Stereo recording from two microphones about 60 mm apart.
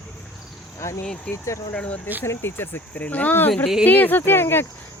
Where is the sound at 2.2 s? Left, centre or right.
Left.